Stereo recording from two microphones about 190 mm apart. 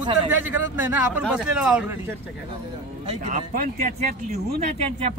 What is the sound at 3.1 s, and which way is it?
Speech, 40° right (ahead or behind).